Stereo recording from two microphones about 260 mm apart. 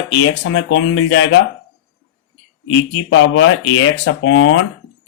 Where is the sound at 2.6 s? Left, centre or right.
Left.